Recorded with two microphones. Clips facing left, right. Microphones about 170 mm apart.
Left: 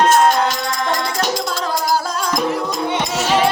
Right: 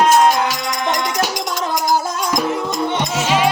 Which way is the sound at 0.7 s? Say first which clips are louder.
Even; 20° right (ahead or behind).